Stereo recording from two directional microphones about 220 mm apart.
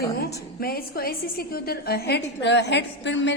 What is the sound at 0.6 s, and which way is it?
A woman's voice, 45° left (ahead or behind).